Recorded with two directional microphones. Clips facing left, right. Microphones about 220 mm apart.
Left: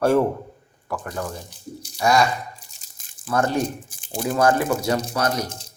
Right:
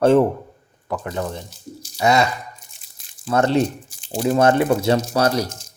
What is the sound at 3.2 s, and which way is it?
Speech, 25° right (ahead or behind).